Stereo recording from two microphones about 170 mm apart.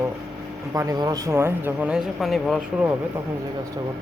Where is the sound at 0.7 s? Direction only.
20° right (ahead or behind); by 2.6 s centre (ahead or behind).